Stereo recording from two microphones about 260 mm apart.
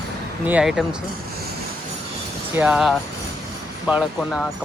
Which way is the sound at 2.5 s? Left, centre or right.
Centre.